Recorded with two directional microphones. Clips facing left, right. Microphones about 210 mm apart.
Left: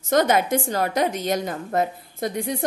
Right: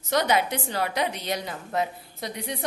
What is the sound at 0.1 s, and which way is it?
A woman's voice, 50° left (ahead or behind).